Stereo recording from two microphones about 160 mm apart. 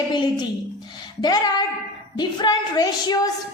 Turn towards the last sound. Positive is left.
turn(degrees=25)  # may be behind; listen again after turning